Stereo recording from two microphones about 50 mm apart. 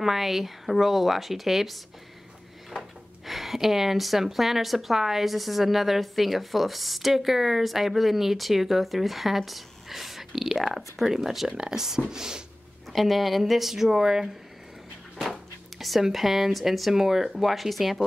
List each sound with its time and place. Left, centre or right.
0.0 s a woman's voice: centre
3.3 s a woman's voice: centre
12.9 s a woman's voice: centre
15.8 s a woman's voice: centre